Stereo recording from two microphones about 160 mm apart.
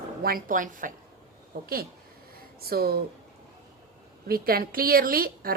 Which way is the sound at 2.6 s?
70° right (ahead or behind).